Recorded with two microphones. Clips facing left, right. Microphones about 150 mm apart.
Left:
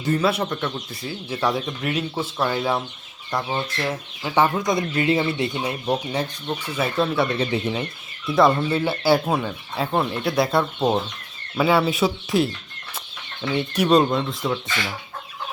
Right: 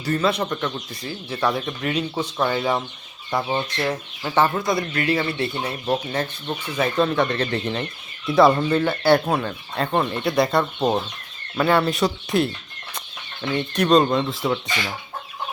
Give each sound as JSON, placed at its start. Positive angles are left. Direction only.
{"t": 0.0, "sound": "speech", "side_deg": 10}
{"t": 4.4, "sound": "speech", "side_deg": 15}
{"t": 13.5, "sound": "speech", "side_deg": 10}